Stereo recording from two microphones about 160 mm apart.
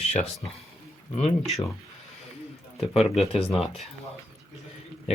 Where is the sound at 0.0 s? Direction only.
40° left (ahead or behind).